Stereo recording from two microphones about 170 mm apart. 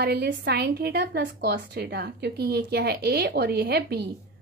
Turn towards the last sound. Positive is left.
turn(degrees=-70)  # may be behind; listen again after turning